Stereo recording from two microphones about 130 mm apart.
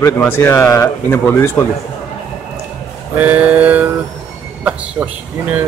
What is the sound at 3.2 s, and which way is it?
Speech, 10° right (ahead or behind).